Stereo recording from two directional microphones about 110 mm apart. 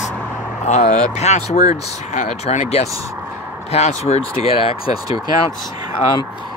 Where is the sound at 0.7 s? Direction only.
90° left; by 4.8 s 65° left (ahead or behind).